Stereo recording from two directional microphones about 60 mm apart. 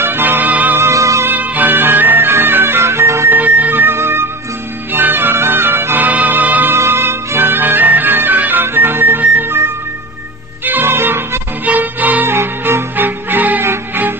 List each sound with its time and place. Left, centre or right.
0.0 s music: right
0.7 s music: right
1.2 s music: right
3.3 s music: right
6.0 s music: right
6.7 s music: right
11.6 s music: right
12.3 s music: right